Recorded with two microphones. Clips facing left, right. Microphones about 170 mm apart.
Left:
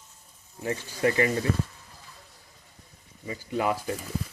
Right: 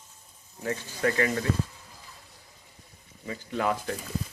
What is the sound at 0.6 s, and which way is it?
Speech, 20° left (ahead or behind).